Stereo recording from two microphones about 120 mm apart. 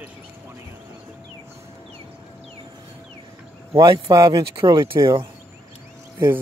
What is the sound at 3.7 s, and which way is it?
A man's voice, 40° right (ahead or behind).